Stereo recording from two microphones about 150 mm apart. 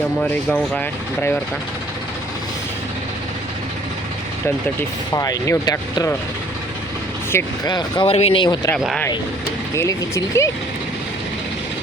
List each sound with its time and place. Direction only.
0.2 s speech: 5° left (ahead or behind)
4.4 s speech: 20° left (ahead or behind)
7.3 s speech: 15° left (ahead or behind)
7.7 s speech: 30° left (ahead or behind)
8.0 s speech: 40° left (ahead or behind)
9.7 s speech: 20° left (ahead or behind)